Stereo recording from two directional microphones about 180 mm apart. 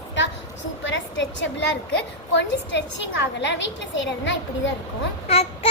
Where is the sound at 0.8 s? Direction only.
90° left.